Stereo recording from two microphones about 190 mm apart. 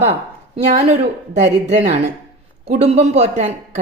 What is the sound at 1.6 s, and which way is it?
Speech, 35° right (ahead or behind).